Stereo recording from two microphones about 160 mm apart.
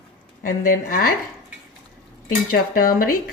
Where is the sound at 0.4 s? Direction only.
65° left (ahead or behind).